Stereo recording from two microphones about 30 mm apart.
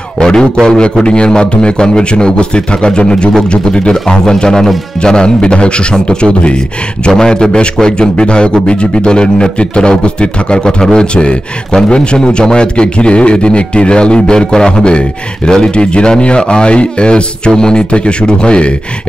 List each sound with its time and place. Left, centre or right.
0.2 s a man's voice: left
14.9 s a man's voice: left